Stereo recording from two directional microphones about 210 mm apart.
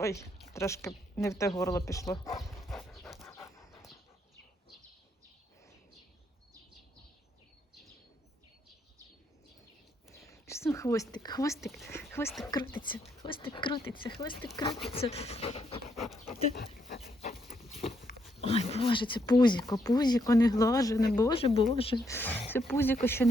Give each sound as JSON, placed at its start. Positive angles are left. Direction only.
{"t": 0.0, "sound": "speech", "side_deg": 15}
{"t": 2.6, "sound": "dog", "side_deg": 0}
{"t": 3.2, "sound": "dog", "side_deg": 10}
{"t": 10.2, "sound": "whispering", "side_deg": 15}
{"t": 11.6, "sound": "speech", "side_deg": 0}
{"t": 11.9, "sound": "speech", "side_deg": 10}
{"t": 17.0, "sound": "a sound", "side_deg": 30}
{"t": 18.3, "sound": "speech", "side_deg": 30}
{"t": 22.0, "sound": "speech", "side_deg": 10}